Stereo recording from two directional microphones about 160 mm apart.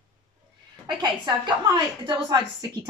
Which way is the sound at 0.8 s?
30° right (ahead or behind).